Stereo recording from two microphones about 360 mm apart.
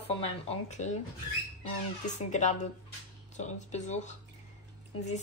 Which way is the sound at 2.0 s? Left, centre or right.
Centre.